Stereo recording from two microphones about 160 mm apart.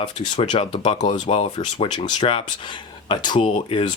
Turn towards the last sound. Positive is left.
turn(degrees=35)  # may be behind; listen again after turning